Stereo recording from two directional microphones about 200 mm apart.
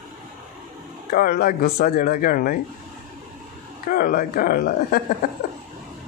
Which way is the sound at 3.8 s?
45° left (ahead or behind).